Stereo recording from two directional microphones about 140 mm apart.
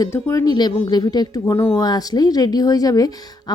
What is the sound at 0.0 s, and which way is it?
A woman's voice, 20° left (ahead or behind).